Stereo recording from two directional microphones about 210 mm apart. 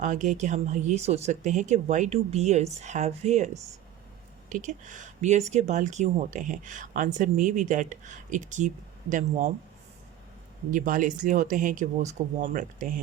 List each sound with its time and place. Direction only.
0.0 s speech: 35° right (ahead or behind)
10.7 s speech: 40° right (ahead or behind)